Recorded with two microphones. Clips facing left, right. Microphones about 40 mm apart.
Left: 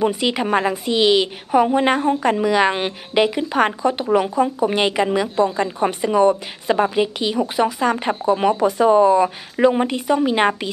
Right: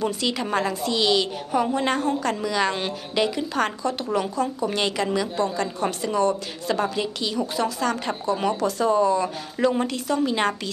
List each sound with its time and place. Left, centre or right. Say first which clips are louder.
0.0 s a woman's voice: left 6 dB; left